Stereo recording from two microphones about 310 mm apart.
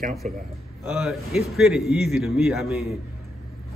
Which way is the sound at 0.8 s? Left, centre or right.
Centre.